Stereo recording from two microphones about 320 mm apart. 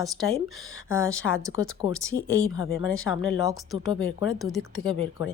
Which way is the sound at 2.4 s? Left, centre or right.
Left.